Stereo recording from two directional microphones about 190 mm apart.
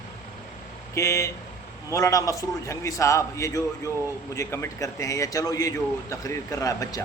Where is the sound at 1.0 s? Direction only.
15° left (ahead or behind).